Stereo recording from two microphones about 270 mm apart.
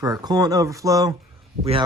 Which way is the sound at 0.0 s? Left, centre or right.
Centre.